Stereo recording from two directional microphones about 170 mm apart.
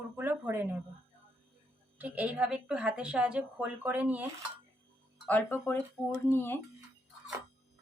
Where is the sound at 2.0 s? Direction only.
10° right (ahead or behind).